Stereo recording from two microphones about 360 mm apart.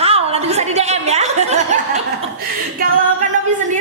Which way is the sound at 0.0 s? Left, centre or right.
Centre.